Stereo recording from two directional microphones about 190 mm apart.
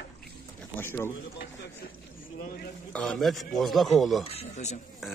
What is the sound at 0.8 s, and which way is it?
Speech, 10° left (ahead or behind).